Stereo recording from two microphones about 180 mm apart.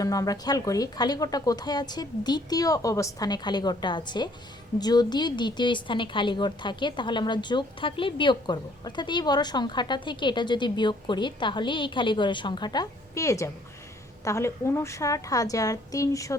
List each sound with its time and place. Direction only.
0.0 s a woman's voice: 20° left (ahead or behind)